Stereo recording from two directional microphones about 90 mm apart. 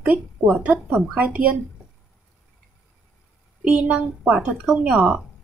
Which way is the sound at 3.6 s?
15° right (ahead or behind).